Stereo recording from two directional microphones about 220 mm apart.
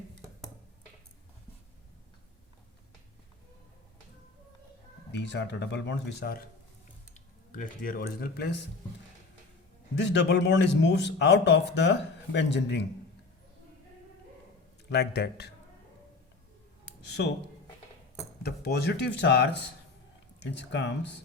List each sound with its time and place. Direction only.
5.1 s speech: 50° left (ahead or behind)
7.1 s speech: 35° left (ahead or behind)
10.0 s speech: 50° left (ahead or behind)
14.8 s speech: 50° left (ahead or behind)
18.4 s speech: 45° left (ahead or behind)